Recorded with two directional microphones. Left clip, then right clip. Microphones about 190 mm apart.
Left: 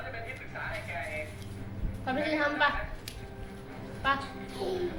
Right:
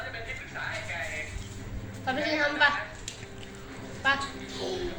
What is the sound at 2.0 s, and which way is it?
Speech, 5° left (ahead or behind).